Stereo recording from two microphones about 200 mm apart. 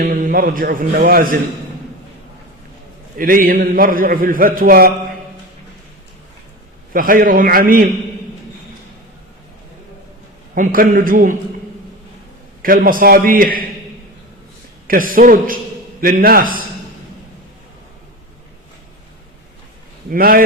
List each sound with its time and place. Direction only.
0.0 s a man's voice: 45° right (ahead or behind)
3.2 s a man's voice: 45° right (ahead or behind)
6.9 s a man's voice: 45° right (ahead or behind)
10.5 s a man's voice: 45° right (ahead or behind)
12.6 s a man's voice: 45° right (ahead or behind)
14.8 s a man's voice: 45° right (ahead or behind)
20.1 s a man's voice: 45° right (ahead or behind)